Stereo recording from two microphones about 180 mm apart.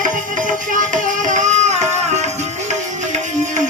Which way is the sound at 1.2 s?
45° right (ahead or behind).